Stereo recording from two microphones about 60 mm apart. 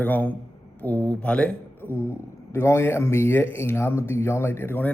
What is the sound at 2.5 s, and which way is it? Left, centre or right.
Speech, left.